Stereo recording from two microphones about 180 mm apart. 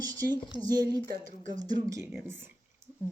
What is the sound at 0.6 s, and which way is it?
Speech, 20° right (ahead or behind).